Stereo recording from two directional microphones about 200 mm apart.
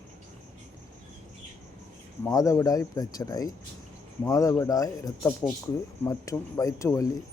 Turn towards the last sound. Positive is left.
turn(degrees=15)  # may be behind; listen again after turning